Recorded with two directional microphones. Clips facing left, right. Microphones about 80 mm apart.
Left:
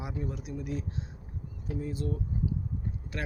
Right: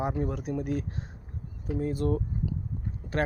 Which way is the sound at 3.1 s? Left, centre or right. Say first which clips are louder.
Right 9 dB; right.